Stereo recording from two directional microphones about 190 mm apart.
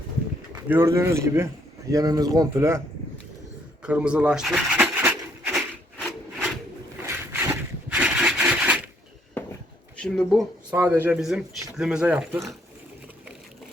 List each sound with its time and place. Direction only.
0.5 s speech: 15° right (ahead or behind)
3.8 s a sound: 5° right (ahead or behind)
6.0 s rub: centre (ahead or behind)
7.0 s a sound: 15° right (ahead or behind)
10.0 s speech: 5° left (ahead or behind)
10.8 s speech: 10° right (ahead or behind)